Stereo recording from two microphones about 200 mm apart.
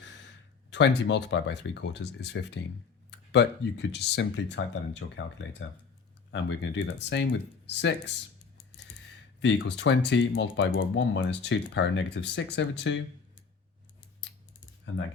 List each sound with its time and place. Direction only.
0.7 s speech: 60° left (ahead or behind)
9.4 s speech: 60° left (ahead or behind)